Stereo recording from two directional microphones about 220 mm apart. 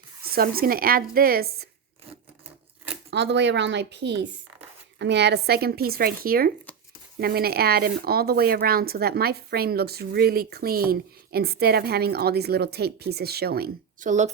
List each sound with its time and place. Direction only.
0.3 s speech: 45° right (ahead or behind)
3.1 s speech: 50° right (ahead or behind); by 14.3 s 35° right (ahead or behind)